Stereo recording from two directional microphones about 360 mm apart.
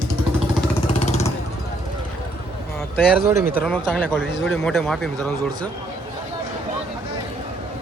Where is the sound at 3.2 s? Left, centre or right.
Centre.